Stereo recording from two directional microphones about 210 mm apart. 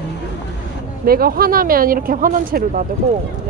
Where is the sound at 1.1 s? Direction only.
45° right (ahead or behind).